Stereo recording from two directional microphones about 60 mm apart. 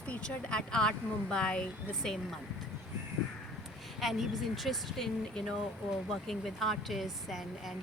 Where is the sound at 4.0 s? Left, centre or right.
Centre.